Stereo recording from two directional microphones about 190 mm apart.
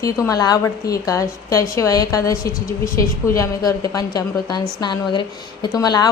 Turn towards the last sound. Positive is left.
turn(degrees=20)  # may be behind; listen again after turning